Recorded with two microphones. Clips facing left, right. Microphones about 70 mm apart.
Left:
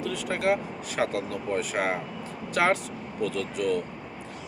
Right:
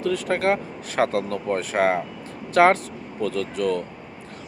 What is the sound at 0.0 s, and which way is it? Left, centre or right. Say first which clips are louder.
Speech: right 5 dB; right.